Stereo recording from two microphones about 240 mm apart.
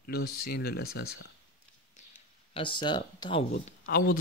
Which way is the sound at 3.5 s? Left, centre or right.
Left.